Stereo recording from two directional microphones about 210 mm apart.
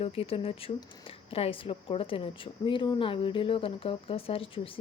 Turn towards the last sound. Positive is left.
turn(degrees=25)  # may be behind; listen again after turning